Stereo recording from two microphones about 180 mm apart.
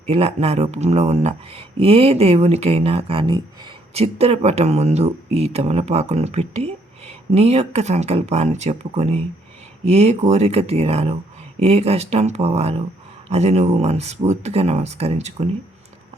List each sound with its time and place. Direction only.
0.1 s speech: 35° right (ahead or behind)